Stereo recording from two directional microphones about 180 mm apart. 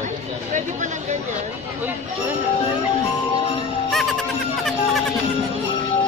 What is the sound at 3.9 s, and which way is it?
Music, centre (ahead or behind).